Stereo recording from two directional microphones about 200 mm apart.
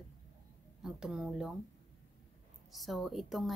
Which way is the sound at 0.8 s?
5° right (ahead or behind).